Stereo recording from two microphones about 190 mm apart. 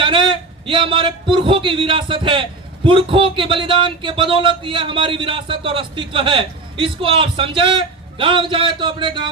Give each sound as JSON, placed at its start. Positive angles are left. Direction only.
{"t": 0.0, "sound": "speech", "side_deg": -25}